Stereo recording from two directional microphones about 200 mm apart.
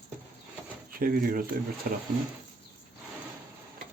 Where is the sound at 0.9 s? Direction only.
45° right (ahead or behind).